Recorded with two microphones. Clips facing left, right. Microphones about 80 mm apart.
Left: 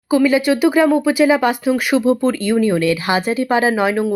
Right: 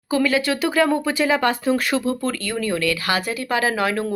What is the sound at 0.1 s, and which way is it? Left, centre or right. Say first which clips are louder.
Speech: left 6 dB; centre.